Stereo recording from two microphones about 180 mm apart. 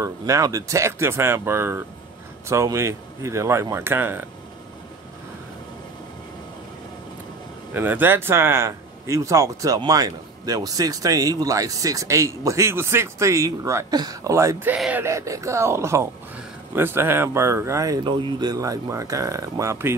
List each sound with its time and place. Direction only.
0.0 s speech: 20° right (ahead or behind)
7.7 s speech: 10° right (ahead or behind)